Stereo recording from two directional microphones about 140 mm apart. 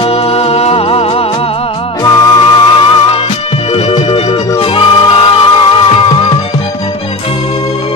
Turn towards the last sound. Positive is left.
turn(degrees=35)  # may be behind; listen again after turning